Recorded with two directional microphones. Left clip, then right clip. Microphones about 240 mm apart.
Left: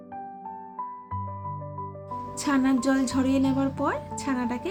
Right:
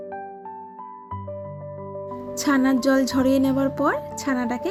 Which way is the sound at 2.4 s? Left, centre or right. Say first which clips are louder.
Right 4 dB; right.